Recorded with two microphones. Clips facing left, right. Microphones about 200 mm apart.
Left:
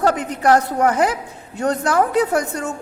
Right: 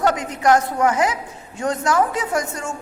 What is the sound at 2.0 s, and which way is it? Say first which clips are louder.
Speech: left 4 dB; 60° left (ahead or behind).